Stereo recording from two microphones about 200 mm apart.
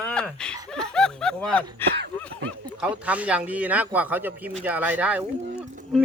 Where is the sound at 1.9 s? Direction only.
60° right (ahead or behind).